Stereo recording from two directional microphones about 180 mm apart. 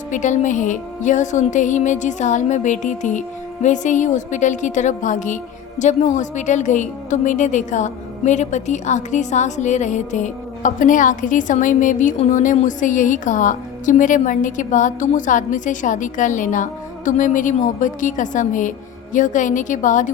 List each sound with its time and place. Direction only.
0.1 s a woman's voice: 45° left (ahead or behind)